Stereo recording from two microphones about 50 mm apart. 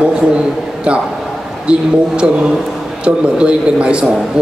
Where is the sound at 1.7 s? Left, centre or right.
Centre.